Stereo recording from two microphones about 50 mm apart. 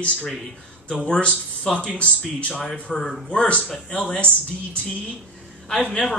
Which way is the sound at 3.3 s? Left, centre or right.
Left.